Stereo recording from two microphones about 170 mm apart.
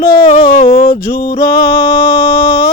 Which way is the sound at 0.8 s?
60° left (ahead or behind).